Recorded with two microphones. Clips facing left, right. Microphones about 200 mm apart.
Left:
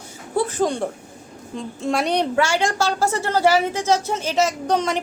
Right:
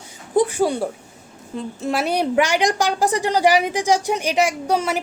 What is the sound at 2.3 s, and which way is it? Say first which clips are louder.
A woman's voice: right 2 dB; 15° right (ahead or behind).